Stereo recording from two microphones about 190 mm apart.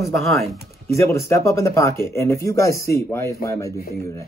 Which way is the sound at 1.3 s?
15° left (ahead or behind).